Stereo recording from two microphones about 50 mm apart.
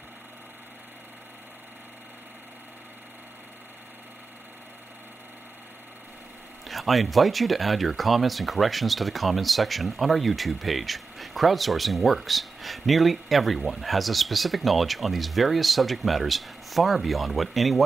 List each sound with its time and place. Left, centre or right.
6.7 s speech: centre